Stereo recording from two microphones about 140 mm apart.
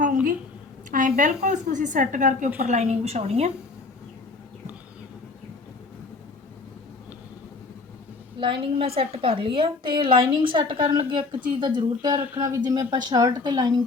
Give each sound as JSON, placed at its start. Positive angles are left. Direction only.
{"t": 0.9, "sound": "a woman's voice", "side_deg": -65}
{"t": 8.4, "sound": "a woman's voice", "side_deg": -35}